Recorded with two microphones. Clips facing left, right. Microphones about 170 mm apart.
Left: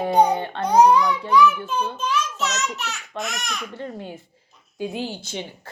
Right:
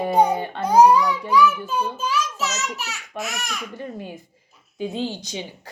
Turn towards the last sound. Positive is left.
turn(degrees=15)  # may be behind; listen again after turning